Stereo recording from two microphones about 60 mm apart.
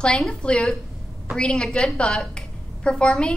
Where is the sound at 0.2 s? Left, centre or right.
Centre.